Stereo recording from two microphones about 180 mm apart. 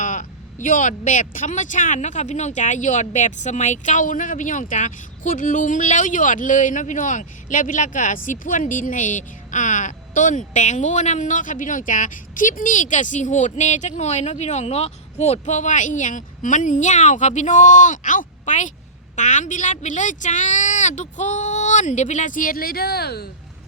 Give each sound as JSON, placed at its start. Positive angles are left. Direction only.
{"t": 0.0, "sound": "speech", "side_deg": 45}